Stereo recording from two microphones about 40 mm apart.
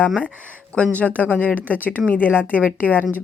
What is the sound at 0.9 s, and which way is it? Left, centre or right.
Speech, left.